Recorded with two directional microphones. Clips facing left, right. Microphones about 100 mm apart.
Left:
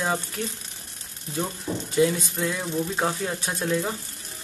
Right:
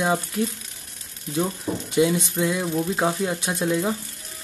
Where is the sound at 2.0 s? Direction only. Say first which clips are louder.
Right 2 dB; 15° right (ahead or behind).